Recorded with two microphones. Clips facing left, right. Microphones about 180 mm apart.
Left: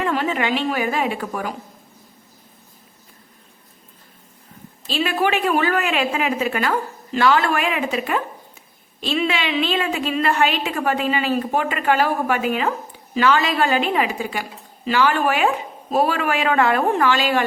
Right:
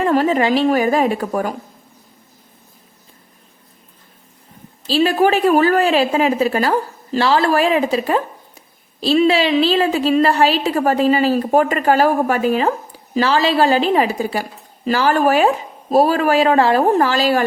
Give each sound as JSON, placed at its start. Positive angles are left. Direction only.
{"t": 0.0, "sound": "a woman's voice", "side_deg": -40}
{"t": 4.9, "sound": "a woman's voice", "side_deg": -35}